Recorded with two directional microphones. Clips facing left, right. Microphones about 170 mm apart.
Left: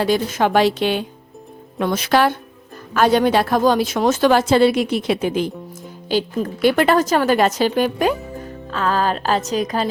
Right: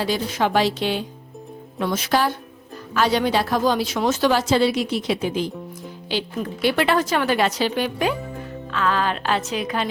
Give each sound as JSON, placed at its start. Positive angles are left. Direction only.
{"t": 0.0, "sound": "a woman's voice", "side_deg": 50}
{"t": 2.9, "sound": "speech", "side_deg": 50}
{"t": 6.1, "sound": "a woman's voice", "side_deg": 45}